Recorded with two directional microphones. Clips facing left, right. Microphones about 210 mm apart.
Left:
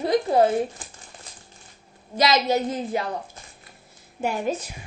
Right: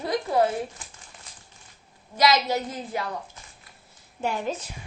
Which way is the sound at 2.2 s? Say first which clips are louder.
Left 2 dB; 25° left (ahead or behind).